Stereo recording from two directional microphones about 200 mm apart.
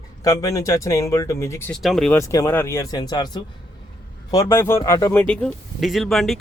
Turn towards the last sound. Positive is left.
turn(degrees=0)  # may be behind; listen again after turning